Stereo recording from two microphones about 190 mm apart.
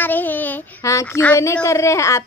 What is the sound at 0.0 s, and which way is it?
A child's voice, 10° left (ahead or behind).